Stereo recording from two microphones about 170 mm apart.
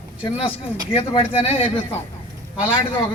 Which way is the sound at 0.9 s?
35° left (ahead or behind).